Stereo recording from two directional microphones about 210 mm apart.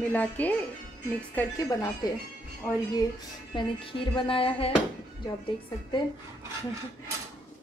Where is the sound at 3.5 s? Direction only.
25° left (ahead or behind).